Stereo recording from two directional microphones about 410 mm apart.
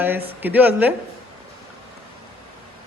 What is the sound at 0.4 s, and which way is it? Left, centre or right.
Speech, centre.